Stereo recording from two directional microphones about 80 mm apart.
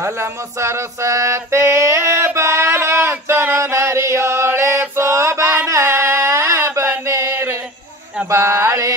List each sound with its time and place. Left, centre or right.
0.0 s music: right
5.7 s a sound: right
8.3 s mantra: right